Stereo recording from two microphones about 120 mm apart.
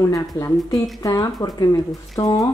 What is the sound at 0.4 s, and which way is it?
Speech, 30° left (ahead or behind).